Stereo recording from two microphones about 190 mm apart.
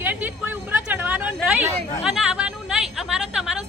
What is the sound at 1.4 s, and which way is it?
Chatter, 5° right (ahead or behind).